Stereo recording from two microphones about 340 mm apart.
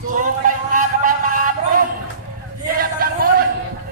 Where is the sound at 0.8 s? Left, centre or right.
Right.